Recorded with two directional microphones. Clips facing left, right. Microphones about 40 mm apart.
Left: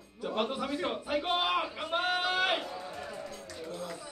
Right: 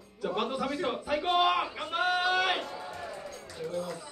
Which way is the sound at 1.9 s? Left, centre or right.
Centre.